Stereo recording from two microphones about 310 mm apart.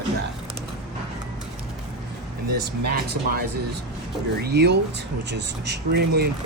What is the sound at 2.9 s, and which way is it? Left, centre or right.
Speech, right.